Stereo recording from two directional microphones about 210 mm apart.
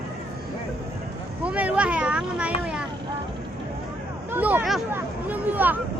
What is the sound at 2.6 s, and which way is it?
Vehicle, 5° right (ahead or behind).